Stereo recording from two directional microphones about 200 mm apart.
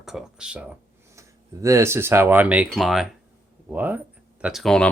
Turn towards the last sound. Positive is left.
turn(degrees=5)  # may be behind; listen again after turning